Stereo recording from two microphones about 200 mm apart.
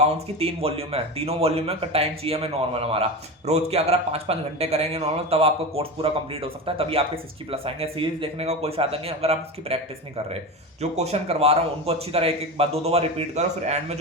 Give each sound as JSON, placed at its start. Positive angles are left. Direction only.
{"t": 0.0, "sound": "a man's voice", "side_deg": -30}